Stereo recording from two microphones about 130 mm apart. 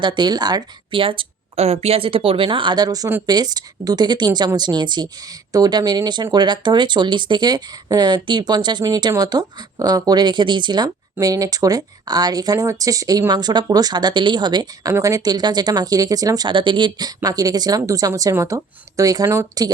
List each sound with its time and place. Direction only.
0.0 s speech: 35° right (ahead or behind)